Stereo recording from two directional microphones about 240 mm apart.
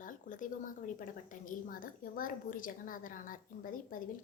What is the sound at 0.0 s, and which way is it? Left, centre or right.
A woman's voice, left.